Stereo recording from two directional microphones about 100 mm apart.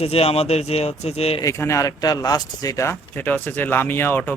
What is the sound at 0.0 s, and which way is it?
Speech, 90° left.